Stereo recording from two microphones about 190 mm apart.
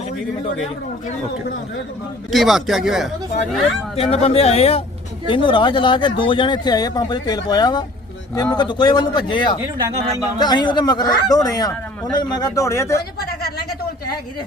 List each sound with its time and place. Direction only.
2.3 s speech: centre (ahead or behind)
3.9 s a man's voice: 30° left (ahead or behind); by 13.0 s 15° left (ahead or behind)